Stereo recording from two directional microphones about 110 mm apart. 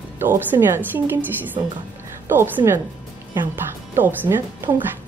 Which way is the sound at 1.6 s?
45° right (ahead or behind).